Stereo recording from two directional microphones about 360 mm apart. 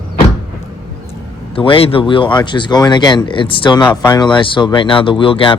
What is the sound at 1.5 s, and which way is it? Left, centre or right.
Speech, centre.